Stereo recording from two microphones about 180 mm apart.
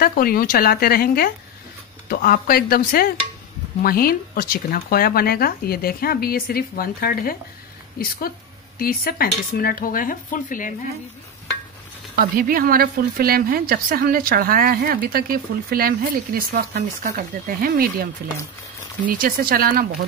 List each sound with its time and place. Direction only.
0.0 s speech: 55° left (ahead or behind)
8.7 s dishes: 55° left (ahead or behind)
12.2 s a woman's voice: 55° right (ahead or behind)